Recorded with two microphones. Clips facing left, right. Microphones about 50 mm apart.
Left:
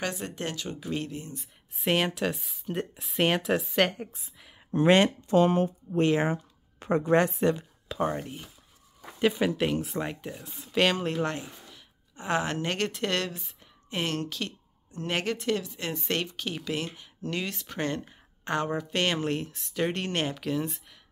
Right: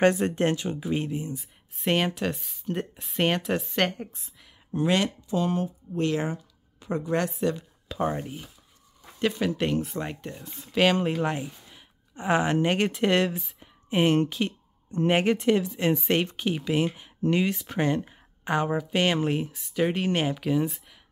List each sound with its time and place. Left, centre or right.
0.0 s speech: right
0.7 s speech: centre
1.4 s speech: centre
4.6 s speech: left
7.9 s speech: centre
9.2 s speech: centre
11.2 s speech: centre